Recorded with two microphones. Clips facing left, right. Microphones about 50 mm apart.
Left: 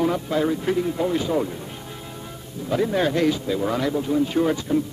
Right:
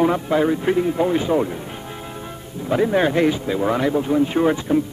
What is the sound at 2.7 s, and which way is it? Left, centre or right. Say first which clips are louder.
Speech: right 4 dB; right.